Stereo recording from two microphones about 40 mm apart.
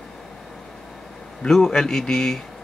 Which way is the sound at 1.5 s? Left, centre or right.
Centre.